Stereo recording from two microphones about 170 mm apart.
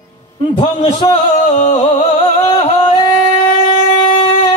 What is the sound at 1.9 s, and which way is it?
Music, 25° left (ahead or behind).